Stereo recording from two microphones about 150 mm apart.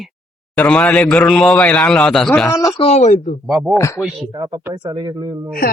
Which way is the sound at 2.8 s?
45° left (ahead or behind).